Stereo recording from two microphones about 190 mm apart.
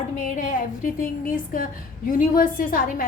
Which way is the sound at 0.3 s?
45° left (ahead or behind).